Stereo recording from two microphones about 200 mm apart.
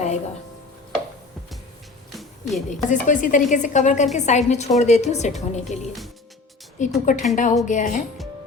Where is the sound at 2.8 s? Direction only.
40° left (ahead or behind).